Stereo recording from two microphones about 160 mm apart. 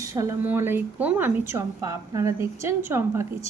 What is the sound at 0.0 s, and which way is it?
A woman's voice, 20° right (ahead or behind).